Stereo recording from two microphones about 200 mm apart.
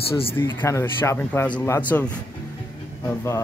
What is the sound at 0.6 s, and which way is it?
Speech, 15° left (ahead or behind).